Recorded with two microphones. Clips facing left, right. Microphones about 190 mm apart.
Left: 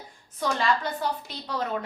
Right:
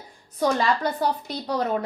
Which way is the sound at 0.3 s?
40° right (ahead or behind).